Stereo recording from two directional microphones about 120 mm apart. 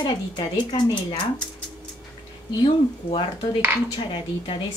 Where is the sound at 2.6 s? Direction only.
40° left (ahead or behind).